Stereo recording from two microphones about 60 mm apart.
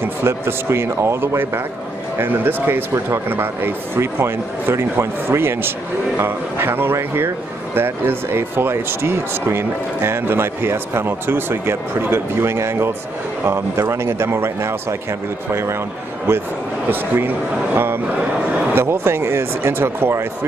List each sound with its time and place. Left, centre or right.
0.0 s speech: right
18.8 s speech: right